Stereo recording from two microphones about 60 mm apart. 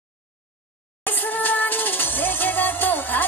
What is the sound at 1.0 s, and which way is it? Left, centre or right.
Music, left.